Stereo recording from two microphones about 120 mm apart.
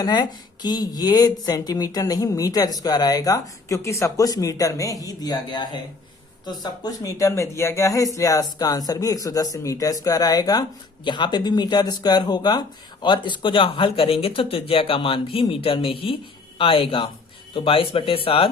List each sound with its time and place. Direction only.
0.0 s speech: 35° left (ahead or behind)